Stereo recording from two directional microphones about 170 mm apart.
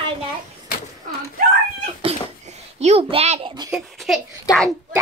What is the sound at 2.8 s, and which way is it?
Speech, 35° right (ahead or behind).